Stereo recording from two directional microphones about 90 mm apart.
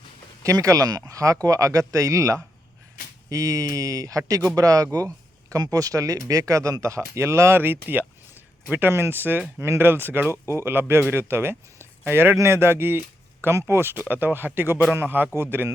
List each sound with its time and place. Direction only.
0.4 s a man's voice: 40° right (ahead or behind)